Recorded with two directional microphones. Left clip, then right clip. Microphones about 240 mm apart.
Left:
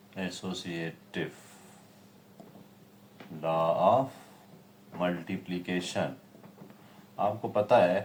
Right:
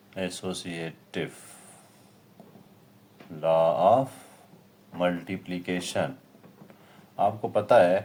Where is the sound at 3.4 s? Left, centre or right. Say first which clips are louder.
Right 5 dB; right.